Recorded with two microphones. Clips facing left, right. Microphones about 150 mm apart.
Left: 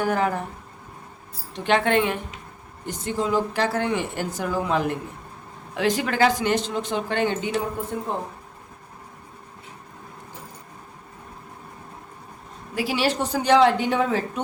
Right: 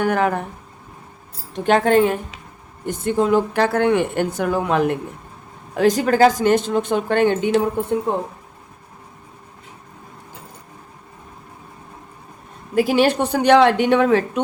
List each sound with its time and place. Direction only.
0.0 s speech: 65° right (ahead or behind)
1.5 s speech: 45° right (ahead or behind)
2.8 s speech: 55° right (ahead or behind)
5.7 s speech: 40° right (ahead or behind)
12.7 s a woman's voice: 50° right (ahead or behind); by 14.4 s 70° right (ahead or behind)